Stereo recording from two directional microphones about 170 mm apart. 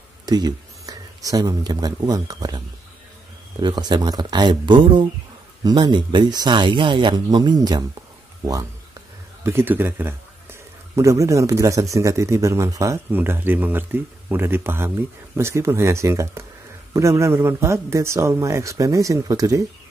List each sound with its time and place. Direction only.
0.3 s speech: 25° right (ahead or behind)
3.6 s speech: 25° right (ahead or behind)
9.4 s a man's voice: 15° right (ahead or behind)